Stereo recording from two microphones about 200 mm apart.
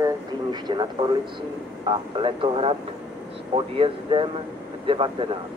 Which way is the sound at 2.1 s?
25° right (ahead or behind).